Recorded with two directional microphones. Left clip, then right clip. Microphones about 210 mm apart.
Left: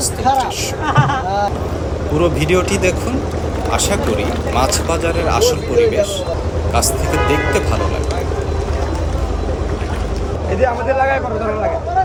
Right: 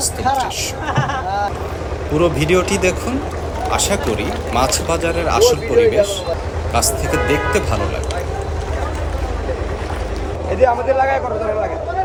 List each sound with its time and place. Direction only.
0.3 s speech: centre (ahead or behind)
2.1 s speech: centre (ahead or behind)
10.6 s a man's voice: 20° right (ahead or behind)